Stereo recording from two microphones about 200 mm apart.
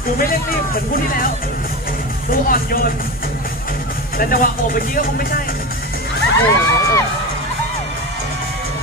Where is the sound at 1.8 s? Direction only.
45° left (ahead or behind).